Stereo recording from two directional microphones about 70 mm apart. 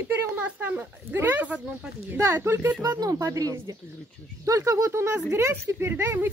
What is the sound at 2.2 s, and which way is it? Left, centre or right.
Speech, right.